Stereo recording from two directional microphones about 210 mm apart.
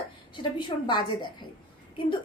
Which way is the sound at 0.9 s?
20° left (ahead or behind).